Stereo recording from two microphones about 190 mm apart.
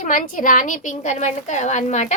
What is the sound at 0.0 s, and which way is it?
A woman's voice, 45° left (ahead or behind).